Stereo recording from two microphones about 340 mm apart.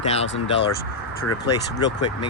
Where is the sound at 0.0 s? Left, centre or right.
Centre.